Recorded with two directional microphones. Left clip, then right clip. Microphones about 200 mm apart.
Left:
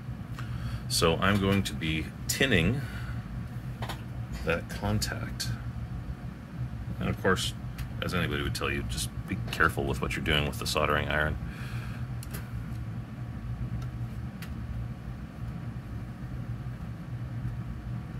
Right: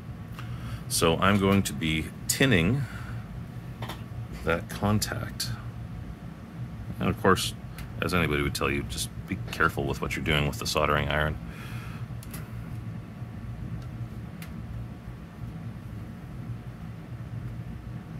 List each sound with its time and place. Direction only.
0.8 s speech: 5° right (ahead or behind)
4.5 s speech: 25° right (ahead or behind)
7.0 s speech: 25° right (ahead or behind)
9.3 s speech: 5° right (ahead or behind)